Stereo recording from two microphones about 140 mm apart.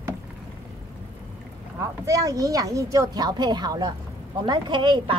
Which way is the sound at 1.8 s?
25° right (ahead or behind).